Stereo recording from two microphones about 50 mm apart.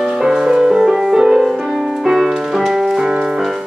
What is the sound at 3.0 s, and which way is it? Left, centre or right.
Music, centre.